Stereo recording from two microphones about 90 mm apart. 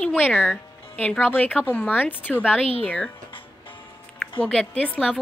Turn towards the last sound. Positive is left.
turn(degrees=0)  # may be behind; listen again after turning